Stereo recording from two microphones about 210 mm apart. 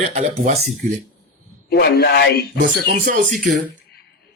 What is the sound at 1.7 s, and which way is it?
Speech, 50° left (ahead or behind).